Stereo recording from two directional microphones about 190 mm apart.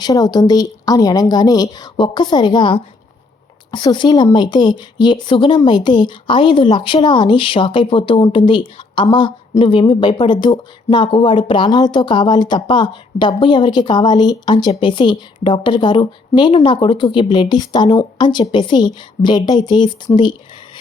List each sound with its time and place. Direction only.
0.0 s speech: 20° left (ahead or behind)